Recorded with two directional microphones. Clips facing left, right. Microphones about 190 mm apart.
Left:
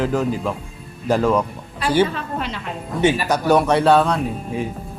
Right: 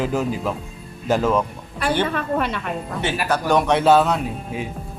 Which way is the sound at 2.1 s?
60° right (ahead or behind).